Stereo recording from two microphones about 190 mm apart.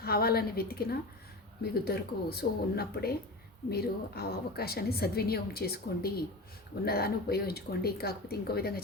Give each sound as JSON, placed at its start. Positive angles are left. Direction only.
{"t": 0.0, "sound": "a woman's voice", "side_deg": 55}